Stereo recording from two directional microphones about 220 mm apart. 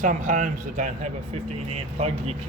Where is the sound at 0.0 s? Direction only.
35° right (ahead or behind).